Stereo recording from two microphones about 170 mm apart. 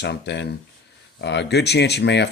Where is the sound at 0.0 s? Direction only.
85° left.